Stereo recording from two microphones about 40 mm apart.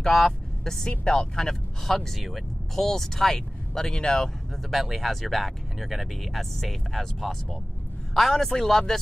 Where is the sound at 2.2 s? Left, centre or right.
Centre.